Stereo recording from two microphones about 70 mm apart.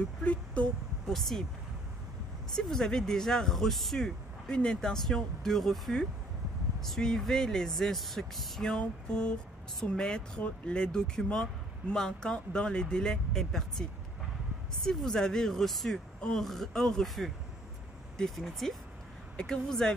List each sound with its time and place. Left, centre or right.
0.2 s a sound: centre
1.0 s speech: centre
2.5 s speech: centre